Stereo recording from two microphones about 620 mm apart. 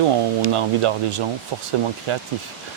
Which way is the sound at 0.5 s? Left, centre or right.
Right.